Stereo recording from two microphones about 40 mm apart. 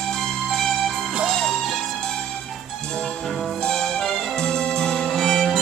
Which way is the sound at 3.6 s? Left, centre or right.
Left.